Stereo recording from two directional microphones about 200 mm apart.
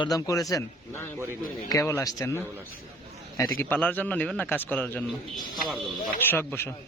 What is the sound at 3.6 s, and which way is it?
Speech, 10° left (ahead or behind).